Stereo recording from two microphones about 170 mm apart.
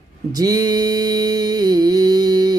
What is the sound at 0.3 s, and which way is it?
Mantra, 20° right (ahead or behind).